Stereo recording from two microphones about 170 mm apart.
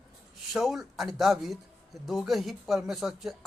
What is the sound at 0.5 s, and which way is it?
Speech, centre (ahead or behind).